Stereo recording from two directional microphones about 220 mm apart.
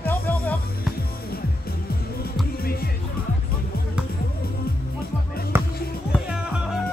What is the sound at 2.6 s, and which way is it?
Music, 45° left (ahead or behind).